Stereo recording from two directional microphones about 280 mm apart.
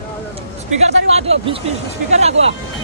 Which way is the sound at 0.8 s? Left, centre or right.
Right.